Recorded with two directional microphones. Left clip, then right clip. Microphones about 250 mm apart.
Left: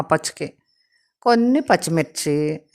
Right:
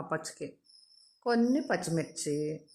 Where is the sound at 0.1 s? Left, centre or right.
Left.